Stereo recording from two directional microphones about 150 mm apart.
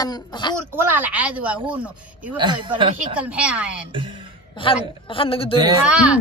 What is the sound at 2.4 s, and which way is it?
Speech, 30° right (ahead or behind).